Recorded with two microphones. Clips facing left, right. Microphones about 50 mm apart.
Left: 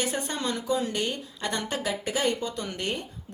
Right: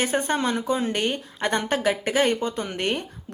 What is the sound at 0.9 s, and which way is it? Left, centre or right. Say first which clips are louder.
Speech: right 4 dB; right.